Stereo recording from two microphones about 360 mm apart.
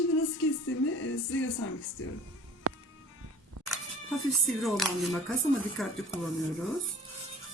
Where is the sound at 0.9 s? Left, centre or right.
Left.